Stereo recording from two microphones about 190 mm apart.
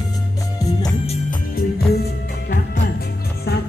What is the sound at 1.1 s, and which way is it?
Music, 45° left (ahead or behind).